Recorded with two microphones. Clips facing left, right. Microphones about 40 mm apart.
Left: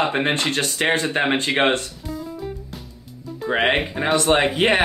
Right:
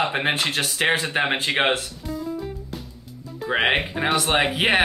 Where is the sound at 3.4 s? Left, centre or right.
Centre.